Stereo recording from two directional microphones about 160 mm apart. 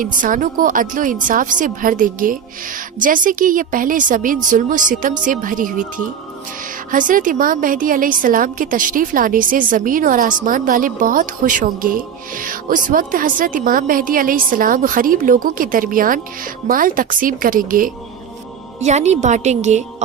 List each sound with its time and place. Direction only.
0.0 s a woman's voice: 55° right (ahead or behind)
6.9 s a woman's voice: 55° right (ahead or behind)
18.8 s a woman's voice: 45° right (ahead or behind)